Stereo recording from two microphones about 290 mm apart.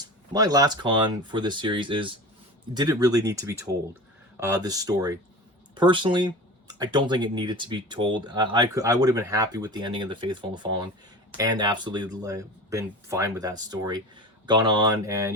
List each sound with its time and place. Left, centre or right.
0.3 s speech: centre